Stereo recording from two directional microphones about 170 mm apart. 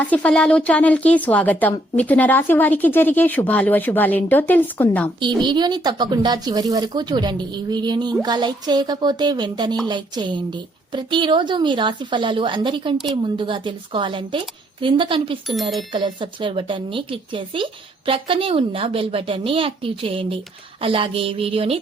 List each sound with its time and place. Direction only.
0.0 s a woman's voice: 10° left (ahead or behind)
5.2 s a woman's voice: 25° right (ahead or behind)